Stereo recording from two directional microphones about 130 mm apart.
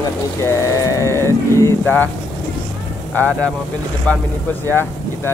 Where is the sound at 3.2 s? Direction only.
10° left (ahead or behind).